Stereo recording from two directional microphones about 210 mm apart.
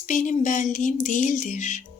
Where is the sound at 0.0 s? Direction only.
35° left (ahead or behind).